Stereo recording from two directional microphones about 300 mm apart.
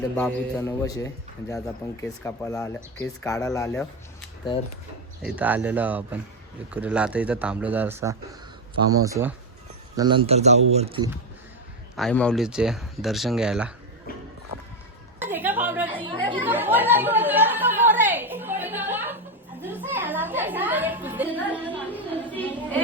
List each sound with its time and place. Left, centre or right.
0.2 s a man's voice: centre
5.2 s a man's voice: centre
11.9 s speech: centre
14.1 s music: left
15.2 s a sound: centre
16.0 s chatter: centre
16.4 s chatter: centre
19.6 s music: centre
22.3 s a sound: centre